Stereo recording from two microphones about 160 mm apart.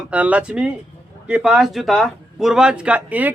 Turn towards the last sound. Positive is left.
turn(degrees=-10)  # may be behind; listen again after turning